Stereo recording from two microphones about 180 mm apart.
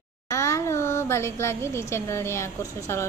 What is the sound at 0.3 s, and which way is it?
A woman's voice, 15° left (ahead or behind).